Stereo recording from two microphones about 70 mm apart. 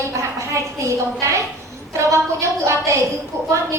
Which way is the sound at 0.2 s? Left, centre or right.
Right.